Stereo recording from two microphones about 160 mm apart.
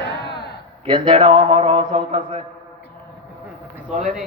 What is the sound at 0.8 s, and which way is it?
A man's voice, 30° right (ahead or behind).